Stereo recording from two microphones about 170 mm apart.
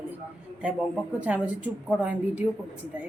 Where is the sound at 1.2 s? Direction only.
10° right (ahead or behind).